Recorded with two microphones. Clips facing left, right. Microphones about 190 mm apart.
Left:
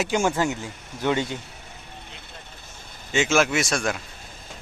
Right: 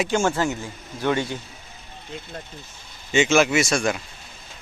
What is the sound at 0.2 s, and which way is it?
Speech, 15° left (ahead or behind).